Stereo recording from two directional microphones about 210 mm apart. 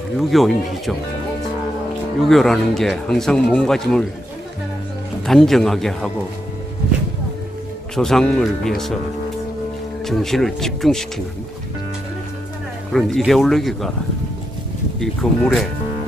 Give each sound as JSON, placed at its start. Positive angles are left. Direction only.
{"t": 0.2, "sound": "speech", "side_deg": 0}
{"t": 2.2, "sound": "speech", "side_deg": 0}
{"t": 5.2, "sound": "speech", "side_deg": 0}
{"t": 7.9, "sound": "speech", "side_deg": 0}
{"t": 10.0, "sound": "speech", "side_deg": 0}
{"t": 12.9, "sound": "speech", "side_deg": 0}
{"t": 15.0, "sound": "speech", "side_deg": 0}